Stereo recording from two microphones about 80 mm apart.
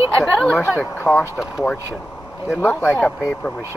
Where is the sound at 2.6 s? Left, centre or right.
Left.